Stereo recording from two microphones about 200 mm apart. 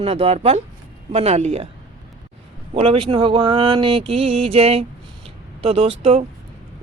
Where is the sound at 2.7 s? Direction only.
25° right (ahead or behind).